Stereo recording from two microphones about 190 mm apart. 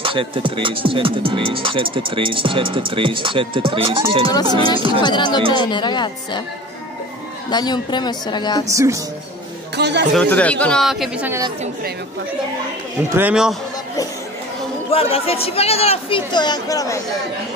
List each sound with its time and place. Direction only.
0.0 s speech: 30° right (ahead or behind)
5.0 s a woman's voice: 25° left (ahead or behind)
7.4 s a woman's voice: 20° left (ahead or behind)
8.6 s speech: 15° right (ahead or behind)
9.8 s speech: 65° right (ahead or behind)
10.1 s speech: 5° left (ahead or behind); by 11.4 s 10° right (ahead or behind)
13.1 s speech: 5° right (ahead or behind)
14.9 s a woman's voice: 30° left (ahead or behind)